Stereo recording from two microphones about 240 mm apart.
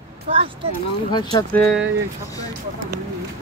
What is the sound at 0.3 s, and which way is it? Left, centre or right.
Speech, right.